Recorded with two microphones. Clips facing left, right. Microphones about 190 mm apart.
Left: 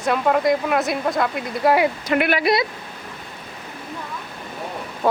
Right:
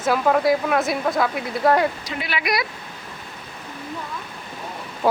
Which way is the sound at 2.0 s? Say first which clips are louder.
Left 10 dB; 55° left (ahead or behind).